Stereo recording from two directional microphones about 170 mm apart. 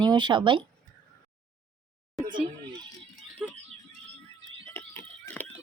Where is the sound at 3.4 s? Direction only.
Centre (ahead or behind).